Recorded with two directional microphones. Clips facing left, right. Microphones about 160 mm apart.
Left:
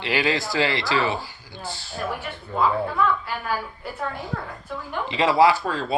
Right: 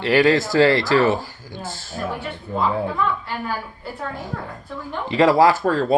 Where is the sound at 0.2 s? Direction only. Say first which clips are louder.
Right 8 dB; 45° right (ahead or behind).